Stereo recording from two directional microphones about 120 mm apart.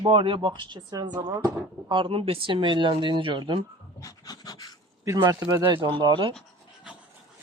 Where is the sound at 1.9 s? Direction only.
45° right (ahead or behind).